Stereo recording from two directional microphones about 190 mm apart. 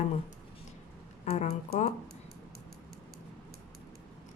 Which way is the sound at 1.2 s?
35° left (ahead or behind).